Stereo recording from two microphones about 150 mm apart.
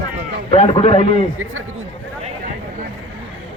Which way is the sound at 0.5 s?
40° left (ahead or behind).